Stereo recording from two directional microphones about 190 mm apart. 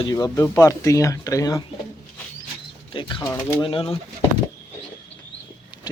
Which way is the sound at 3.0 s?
25° left (ahead or behind).